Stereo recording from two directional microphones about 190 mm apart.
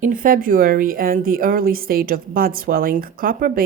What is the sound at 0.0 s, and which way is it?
Speech, 45° right (ahead or behind).